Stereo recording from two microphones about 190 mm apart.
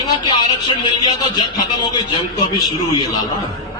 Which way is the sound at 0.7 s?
20° left (ahead or behind).